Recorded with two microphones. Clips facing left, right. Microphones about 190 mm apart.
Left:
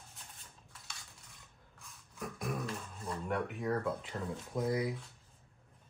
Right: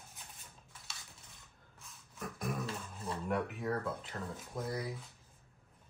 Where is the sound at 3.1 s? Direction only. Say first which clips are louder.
Even; centre (ahead or behind).